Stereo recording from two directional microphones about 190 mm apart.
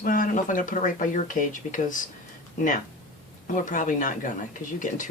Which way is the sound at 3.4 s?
45° left (ahead or behind).